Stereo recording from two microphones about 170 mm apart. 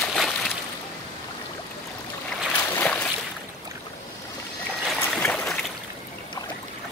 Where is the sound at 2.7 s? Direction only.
10° left (ahead or behind).